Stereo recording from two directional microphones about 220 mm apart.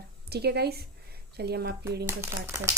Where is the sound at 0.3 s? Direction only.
45° right (ahead or behind).